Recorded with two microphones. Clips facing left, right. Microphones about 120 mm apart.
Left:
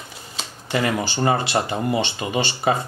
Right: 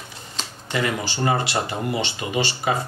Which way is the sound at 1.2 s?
35° left (ahead or behind).